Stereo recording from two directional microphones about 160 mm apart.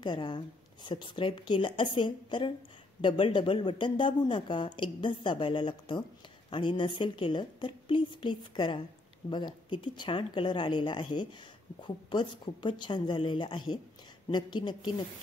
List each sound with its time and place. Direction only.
0.0 s a woman's voice: 30° left (ahead or behind)